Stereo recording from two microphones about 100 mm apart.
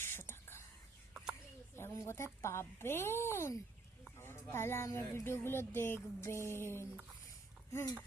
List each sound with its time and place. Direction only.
0.0 s whispering: 25° left (ahead or behind)
1.1 s a sound: 5° right (ahead or behind)
1.7 s speech: 25° left (ahead or behind)